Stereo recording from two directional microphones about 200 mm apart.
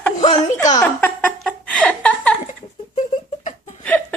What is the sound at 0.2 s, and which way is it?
Speech, 35° left (ahead or behind).